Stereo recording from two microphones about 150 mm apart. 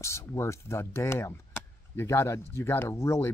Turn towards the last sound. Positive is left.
turn(degrees=20)  # may be behind; listen again after turning